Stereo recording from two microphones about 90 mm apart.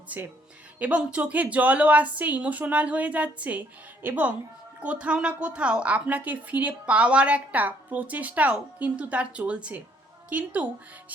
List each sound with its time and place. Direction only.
0.1 s a woman's voice: 15° right (ahead or behind)